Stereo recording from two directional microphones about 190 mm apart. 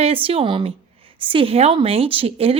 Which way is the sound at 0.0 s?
30° right (ahead or behind).